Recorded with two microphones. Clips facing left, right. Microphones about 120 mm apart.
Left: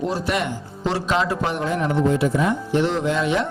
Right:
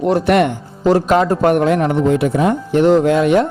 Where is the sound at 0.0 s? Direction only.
60° right (ahead or behind).